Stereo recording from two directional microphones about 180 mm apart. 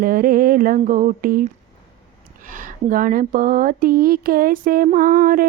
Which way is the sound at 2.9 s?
50° right (ahead or behind).